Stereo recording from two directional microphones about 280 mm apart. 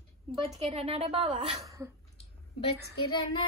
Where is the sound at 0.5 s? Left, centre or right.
Centre.